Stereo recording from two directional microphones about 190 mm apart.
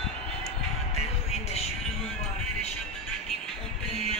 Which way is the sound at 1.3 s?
35° left (ahead or behind).